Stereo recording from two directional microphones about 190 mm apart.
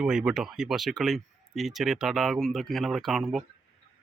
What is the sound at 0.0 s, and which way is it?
Speech, 5° right (ahead or behind).